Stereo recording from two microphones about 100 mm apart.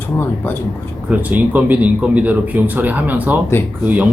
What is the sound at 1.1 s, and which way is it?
Speech, 15° right (ahead or behind).